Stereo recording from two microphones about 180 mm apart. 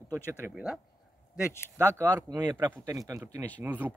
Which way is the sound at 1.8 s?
20° right (ahead or behind).